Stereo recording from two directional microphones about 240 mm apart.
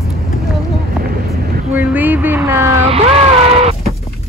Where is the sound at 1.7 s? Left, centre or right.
Centre.